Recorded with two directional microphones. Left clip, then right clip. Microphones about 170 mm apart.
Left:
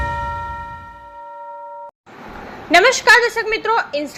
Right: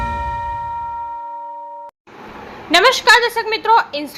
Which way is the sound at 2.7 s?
10° left (ahead or behind).